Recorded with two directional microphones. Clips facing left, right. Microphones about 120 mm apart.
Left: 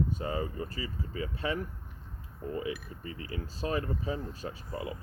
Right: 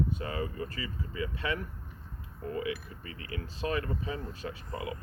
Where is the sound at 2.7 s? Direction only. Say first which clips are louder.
Even; 30° left (ahead or behind).